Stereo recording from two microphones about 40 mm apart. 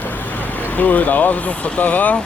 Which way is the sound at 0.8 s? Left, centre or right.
Left.